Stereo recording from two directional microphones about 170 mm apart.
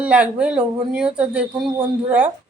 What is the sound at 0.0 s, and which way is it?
A woman's voice, 5° right (ahead or behind).